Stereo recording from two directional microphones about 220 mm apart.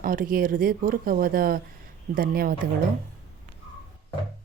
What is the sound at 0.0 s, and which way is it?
A woman's voice, 40° right (ahead or behind).